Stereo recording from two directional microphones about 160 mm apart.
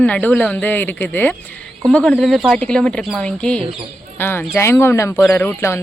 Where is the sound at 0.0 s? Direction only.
10° left (ahead or behind).